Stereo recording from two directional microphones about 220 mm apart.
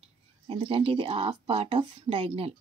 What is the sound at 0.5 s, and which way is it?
Speech, 25° right (ahead or behind).